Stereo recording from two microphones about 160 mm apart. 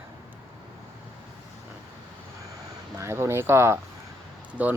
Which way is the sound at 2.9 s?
15° right (ahead or behind).